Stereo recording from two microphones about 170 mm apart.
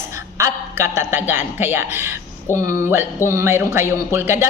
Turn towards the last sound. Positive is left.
turn(degrees=-15)  # may be behind; listen again after turning